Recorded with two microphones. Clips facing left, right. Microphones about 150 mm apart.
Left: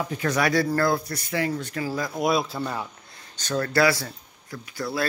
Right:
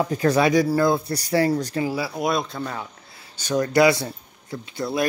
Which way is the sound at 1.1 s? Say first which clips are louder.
Right 6 dB; 35° right (ahead or behind).